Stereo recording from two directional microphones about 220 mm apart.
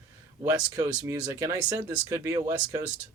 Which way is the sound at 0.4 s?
15° right (ahead or behind).